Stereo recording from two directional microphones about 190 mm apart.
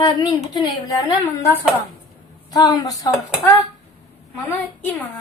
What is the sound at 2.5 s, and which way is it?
Speech, 20° left (ahead or behind).